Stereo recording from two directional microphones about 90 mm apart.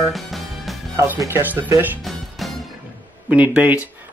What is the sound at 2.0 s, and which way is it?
Music, centre (ahead or behind).